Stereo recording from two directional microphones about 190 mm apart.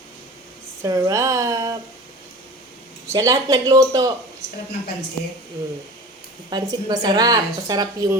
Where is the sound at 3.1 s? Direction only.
20° right (ahead or behind).